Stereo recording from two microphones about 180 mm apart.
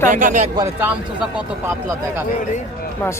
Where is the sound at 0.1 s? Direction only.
45° right (ahead or behind).